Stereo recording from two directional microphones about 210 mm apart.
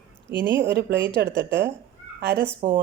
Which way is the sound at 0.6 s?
55° right (ahead or behind).